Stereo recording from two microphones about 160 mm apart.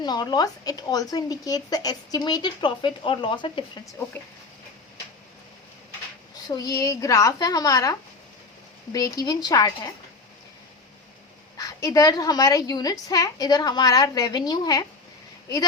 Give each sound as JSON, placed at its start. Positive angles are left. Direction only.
{"t": 0.0, "sound": "speech", "side_deg": 25}
{"t": 3.8, "sound": "speech", "side_deg": 15}
{"t": 6.5, "sound": "speech", "side_deg": 20}
{"t": 11.5, "sound": "speech", "side_deg": 20}